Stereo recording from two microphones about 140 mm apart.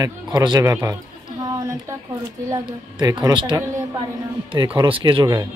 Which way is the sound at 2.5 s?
30° right (ahead or behind).